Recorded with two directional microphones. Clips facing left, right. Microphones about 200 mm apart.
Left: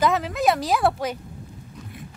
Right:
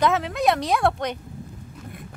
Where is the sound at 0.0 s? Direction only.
Centre (ahead or behind).